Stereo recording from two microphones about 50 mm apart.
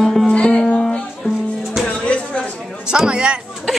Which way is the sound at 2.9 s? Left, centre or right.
Centre.